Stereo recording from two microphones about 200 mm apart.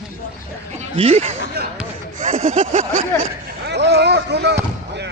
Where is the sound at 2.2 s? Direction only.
40° right (ahead or behind).